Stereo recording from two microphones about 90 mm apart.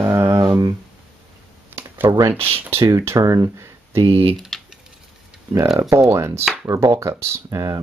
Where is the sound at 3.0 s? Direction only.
35° right (ahead or behind).